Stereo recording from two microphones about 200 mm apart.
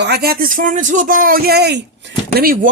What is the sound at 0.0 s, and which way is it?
Speech, 55° right (ahead or behind).